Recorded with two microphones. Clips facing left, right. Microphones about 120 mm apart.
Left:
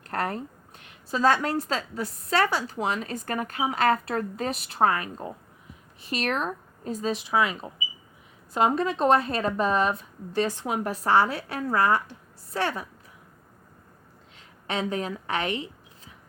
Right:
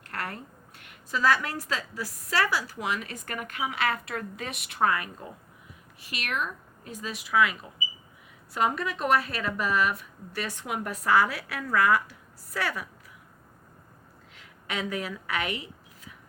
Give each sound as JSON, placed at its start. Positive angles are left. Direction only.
{"t": 0.1, "sound": "a woman's voice", "side_deg": 30}
{"t": 14.7, "sound": "a woman's voice", "side_deg": 30}